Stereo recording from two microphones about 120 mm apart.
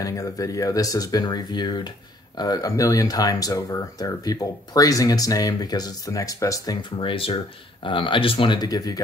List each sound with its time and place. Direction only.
0.0 s speech: 30° left (ahead or behind)